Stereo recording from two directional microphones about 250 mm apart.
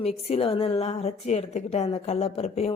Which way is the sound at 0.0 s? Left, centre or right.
Left.